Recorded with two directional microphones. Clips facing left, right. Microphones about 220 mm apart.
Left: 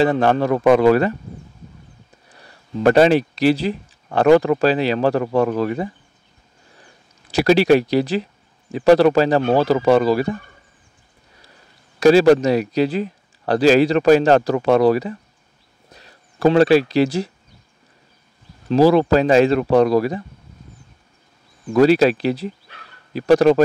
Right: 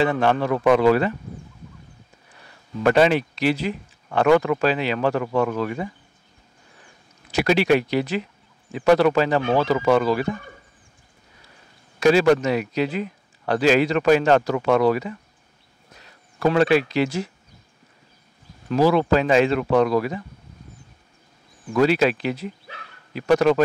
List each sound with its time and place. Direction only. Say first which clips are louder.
0.0 s speech: left 4 dB; 40° left (ahead or behind)
2.8 s speech: left 4 dB; 35° left (ahead or behind)
7.2 s speech: left 5 dB; 35° left (ahead or behind)
12.0 s speech: left 5 dB; 35° left (ahead or behind)
18.7 s speech: left 4 dB; 35° left (ahead or behind)
21.7 s speech: left 5 dB; 35° left (ahead or behind)